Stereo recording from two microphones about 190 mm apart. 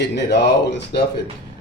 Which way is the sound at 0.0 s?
65° left (ahead or behind).